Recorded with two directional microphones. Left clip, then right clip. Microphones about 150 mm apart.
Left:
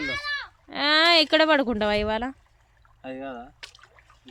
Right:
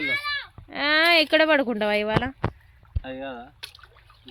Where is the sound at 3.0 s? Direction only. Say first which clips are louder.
Right 1 dB; 20° left (ahead or behind).